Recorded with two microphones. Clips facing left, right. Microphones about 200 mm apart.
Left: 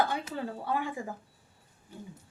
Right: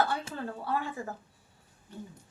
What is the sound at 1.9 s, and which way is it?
Speech, 10° left (ahead or behind).